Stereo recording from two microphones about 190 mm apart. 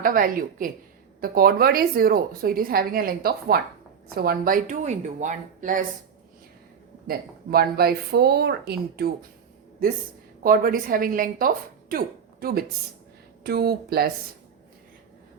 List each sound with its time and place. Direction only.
0.0 s a woman's voice: 45° right (ahead or behind)
7.1 s a woman's voice: 55° right (ahead or behind)
10.4 s a woman's voice: 50° right (ahead or behind)